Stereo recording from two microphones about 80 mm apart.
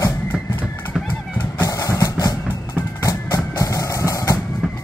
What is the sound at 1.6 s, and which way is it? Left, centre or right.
Music, left.